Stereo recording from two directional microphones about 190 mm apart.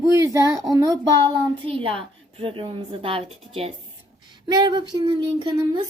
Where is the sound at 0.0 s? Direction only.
15° right (ahead or behind).